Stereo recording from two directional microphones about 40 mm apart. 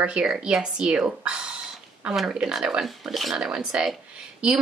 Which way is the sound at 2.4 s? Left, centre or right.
Centre.